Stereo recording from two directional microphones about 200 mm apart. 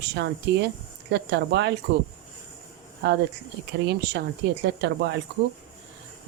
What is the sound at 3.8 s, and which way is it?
Speech, 55° right (ahead or behind).